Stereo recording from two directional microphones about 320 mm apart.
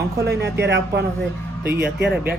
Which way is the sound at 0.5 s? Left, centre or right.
Right.